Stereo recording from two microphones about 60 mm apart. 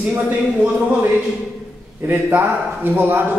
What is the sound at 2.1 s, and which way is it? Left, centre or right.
A man's voice, right.